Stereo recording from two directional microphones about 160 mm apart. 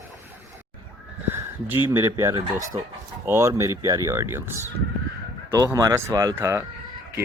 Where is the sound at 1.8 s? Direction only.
15° right (ahead or behind).